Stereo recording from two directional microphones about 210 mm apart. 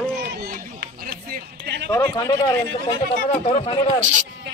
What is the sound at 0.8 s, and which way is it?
Run, 50° right (ahead or behind).